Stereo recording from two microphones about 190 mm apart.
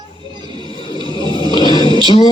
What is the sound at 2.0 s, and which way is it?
Speech, 25° left (ahead or behind).